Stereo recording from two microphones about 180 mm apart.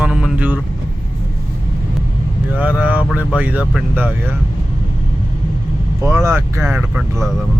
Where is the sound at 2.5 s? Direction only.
5° right (ahead or behind).